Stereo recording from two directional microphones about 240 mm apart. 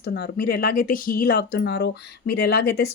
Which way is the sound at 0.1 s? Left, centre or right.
Left.